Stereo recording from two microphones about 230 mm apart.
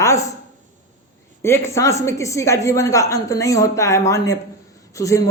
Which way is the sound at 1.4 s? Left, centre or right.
Centre.